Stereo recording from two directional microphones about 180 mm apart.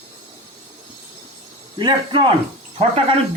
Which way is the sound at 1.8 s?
25° right (ahead or behind).